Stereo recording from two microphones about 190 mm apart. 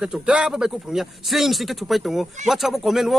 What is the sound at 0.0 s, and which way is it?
A man's voice, 5° right (ahead or behind).